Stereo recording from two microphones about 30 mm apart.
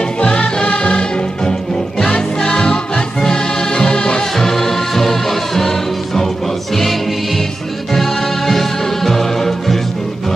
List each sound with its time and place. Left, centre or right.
0.4 s music: left
4.4 s music: centre